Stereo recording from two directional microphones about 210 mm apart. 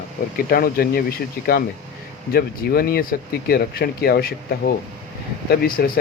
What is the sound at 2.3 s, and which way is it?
Speech, 45° left (ahead or behind).